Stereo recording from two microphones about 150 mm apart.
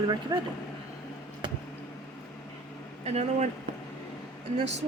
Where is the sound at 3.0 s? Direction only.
45° right (ahead or behind).